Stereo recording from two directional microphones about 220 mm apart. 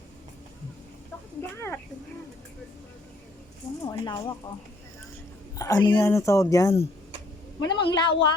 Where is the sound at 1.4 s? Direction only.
10° left (ahead or behind).